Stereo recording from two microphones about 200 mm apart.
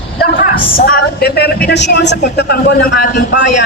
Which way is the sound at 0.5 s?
50° left (ahead or behind).